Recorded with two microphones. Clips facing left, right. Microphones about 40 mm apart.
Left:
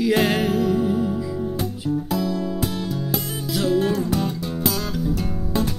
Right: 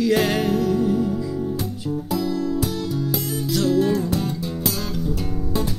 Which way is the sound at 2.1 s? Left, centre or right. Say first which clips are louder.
Right 1 dB; centre.